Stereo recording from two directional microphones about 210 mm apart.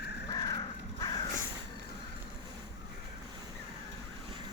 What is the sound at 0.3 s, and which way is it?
Crow, 15° left (ahead or behind).